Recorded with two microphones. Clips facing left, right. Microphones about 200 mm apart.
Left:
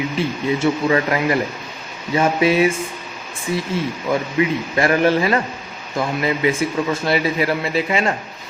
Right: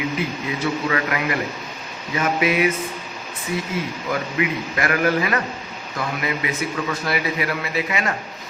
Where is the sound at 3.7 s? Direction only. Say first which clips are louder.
Left 4 dB; 30° left (ahead or behind).